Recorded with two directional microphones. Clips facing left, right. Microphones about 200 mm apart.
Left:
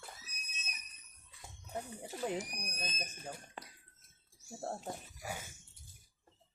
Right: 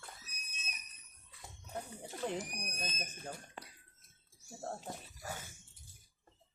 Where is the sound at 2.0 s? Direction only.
5° left (ahead or behind).